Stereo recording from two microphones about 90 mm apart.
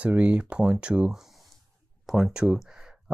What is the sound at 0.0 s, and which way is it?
Speech, 10° right (ahead or behind).